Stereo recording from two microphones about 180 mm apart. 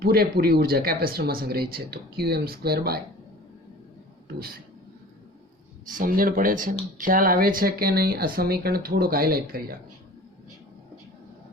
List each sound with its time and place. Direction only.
0.0 s speech: 60° right (ahead or behind)
4.4 s speech: 55° right (ahead or behind)
5.9 s speech: 50° right (ahead or behind)